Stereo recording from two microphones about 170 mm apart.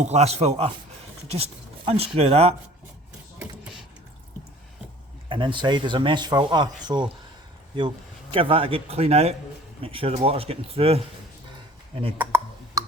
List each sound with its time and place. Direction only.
0.0 s speech: 40° right (ahead or behind)
5.3 s speech: 30° right (ahead or behind)
12.1 s a sound: 10° right (ahead or behind)